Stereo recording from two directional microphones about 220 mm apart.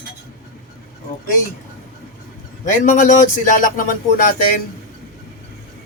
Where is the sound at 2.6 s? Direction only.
35° left (ahead or behind).